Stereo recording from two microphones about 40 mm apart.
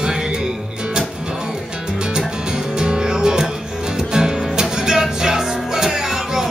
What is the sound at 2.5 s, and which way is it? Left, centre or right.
Music, right.